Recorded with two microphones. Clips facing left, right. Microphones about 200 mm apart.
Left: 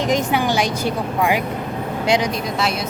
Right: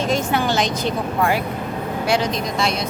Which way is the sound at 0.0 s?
15° left (ahead or behind).